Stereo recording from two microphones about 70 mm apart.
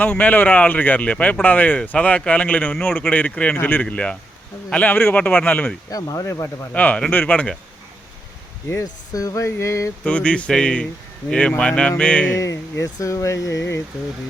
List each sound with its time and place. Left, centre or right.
0.0 s speech: left
5.9 s speech: left
6.7 s speech: left
8.8 s speech: left
10.0 s speech: centre
12.3 s speech: left